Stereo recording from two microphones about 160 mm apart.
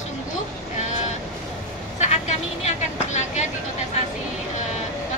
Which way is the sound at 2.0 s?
45° left (ahead or behind).